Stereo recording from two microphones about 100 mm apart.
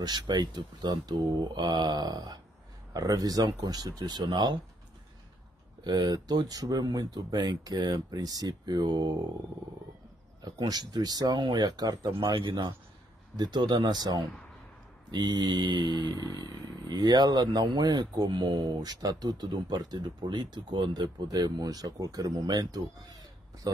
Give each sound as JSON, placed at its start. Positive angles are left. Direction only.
{"t": 0.0, "sound": "speech", "side_deg": -45}
{"t": 5.9, "sound": "speech", "side_deg": -45}
{"t": 10.4, "sound": "speech", "side_deg": -45}
{"t": 12.1, "sound": "speech", "side_deg": -55}